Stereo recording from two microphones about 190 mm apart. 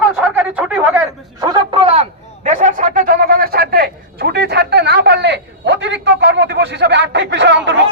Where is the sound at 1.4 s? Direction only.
25° right (ahead or behind); by 7.5 s 65° right (ahead or behind).